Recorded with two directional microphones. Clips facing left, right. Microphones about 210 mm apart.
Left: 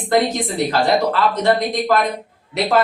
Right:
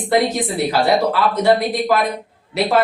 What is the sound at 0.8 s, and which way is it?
Speech, 10° right (ahead or behind).